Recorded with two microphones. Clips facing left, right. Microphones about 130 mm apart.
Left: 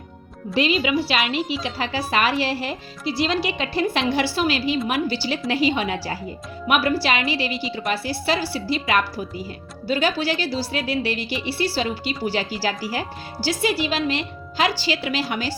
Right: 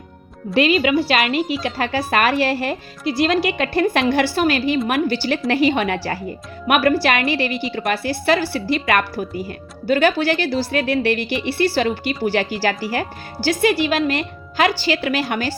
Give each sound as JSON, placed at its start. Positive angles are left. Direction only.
{"t": 0.5, "sound": "a woman's voice", "side_deg": -55}